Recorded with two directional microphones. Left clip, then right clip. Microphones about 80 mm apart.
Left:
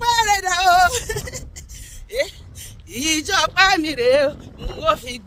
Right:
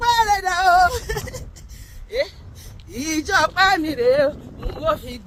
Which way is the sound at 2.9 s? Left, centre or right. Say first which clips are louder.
Left 1 dB; left.